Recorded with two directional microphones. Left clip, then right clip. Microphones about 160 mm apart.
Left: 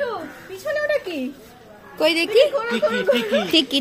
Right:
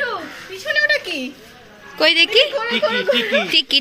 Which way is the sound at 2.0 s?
5° left (ahead or behind).